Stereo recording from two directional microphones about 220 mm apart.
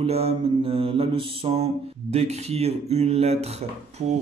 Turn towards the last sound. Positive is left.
turn(degrees=-30)  # may be behind; listen again after turning